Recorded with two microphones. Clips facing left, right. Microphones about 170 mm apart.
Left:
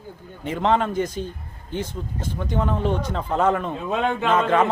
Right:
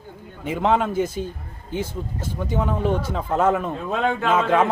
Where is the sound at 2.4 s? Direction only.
5° right (ahead or behind).